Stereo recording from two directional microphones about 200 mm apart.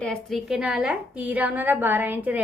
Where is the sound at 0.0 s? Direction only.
Centre (ahead or behind).